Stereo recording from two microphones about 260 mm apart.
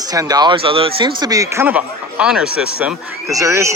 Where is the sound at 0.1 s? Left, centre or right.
Centre.